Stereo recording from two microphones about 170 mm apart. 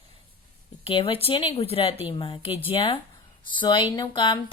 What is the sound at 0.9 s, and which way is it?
A woman's voice, 30° left (ahead or behind).